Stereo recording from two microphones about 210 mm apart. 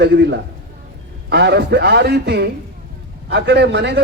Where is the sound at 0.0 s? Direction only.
55° right (ahead or behind).